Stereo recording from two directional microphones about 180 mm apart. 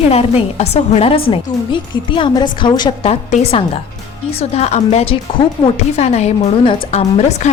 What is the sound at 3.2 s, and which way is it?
A woman's voice, 40° left (ahead or behind).